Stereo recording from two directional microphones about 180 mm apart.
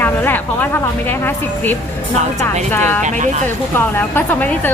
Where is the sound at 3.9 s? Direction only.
10° left (ahead or behind).